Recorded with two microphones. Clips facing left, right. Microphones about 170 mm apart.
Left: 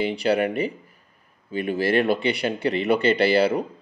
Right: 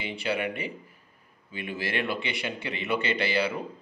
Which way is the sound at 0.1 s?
40° left (ahead or behind).